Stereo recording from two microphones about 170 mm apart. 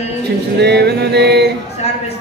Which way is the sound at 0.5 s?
80° right.